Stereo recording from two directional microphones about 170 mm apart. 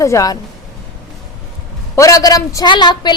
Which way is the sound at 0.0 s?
20° left (ahead or behind).